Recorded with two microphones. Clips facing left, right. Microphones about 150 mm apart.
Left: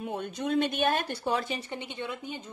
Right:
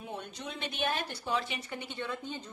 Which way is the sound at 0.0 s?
55° left (ahead or behind).